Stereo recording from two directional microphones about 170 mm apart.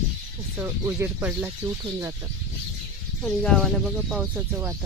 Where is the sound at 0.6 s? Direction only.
15° right (ahead or behind).